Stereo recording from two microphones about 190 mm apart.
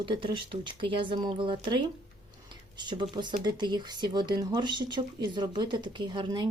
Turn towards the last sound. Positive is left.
turn(degrees=-25)  # may be behind; listen again after turning